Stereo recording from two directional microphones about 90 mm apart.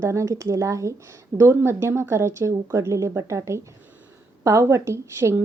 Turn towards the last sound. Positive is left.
turn(degrees=-30)  # may be behind; listen again after turning